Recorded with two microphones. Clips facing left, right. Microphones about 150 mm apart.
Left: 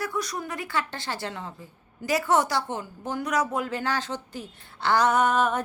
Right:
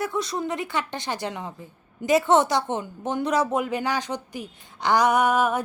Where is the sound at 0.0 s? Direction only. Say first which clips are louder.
Right 4 dB; 25° right (ahead or behind).